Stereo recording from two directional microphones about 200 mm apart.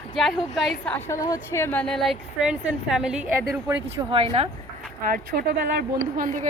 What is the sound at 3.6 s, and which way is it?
Speech, 25° right (ahead or behind).